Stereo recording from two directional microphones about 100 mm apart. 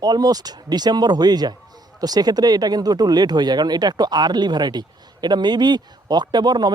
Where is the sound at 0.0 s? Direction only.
40° right (ahead or behind).